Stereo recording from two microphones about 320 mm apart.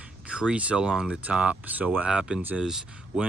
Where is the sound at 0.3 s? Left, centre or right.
Centre.